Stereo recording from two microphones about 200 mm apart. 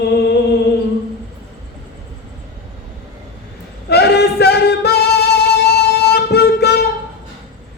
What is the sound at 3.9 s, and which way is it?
Music, 55° left (ahead or behind).